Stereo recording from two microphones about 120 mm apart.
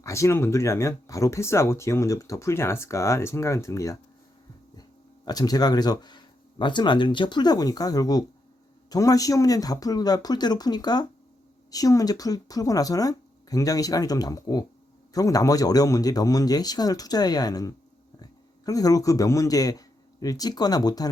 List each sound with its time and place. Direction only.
0.0 s a man's voice: 25° left (ahead or behind)